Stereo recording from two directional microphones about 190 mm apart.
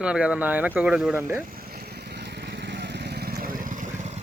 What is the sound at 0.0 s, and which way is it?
Speech, 5° right (ahead or behind).